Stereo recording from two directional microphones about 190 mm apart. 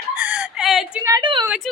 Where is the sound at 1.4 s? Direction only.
5° right (ahead or behind).